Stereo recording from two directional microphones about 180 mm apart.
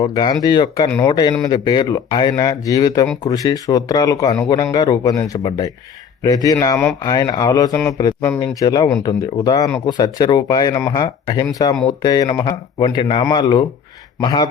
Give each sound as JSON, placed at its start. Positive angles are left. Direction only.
{"t": 0.0, "sound": "speech", "side_deg": 25}